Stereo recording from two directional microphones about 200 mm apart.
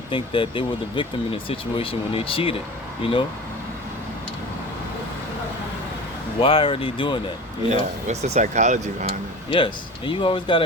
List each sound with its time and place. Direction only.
0.1 s speech: 25° left (ahead or behind)
6.4 s speech: 25° left (ahead or behind)
7.7 s speech: 35° right (ahead or behind)
9.5 s speech: 25° left (ahead or behind)